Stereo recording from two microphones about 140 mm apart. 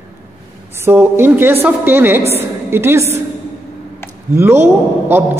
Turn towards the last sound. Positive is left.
turn(degrees=-15)  # may be behind; listen again after turning